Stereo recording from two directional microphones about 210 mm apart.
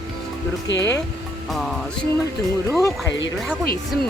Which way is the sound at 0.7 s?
60° left (ahead or behind).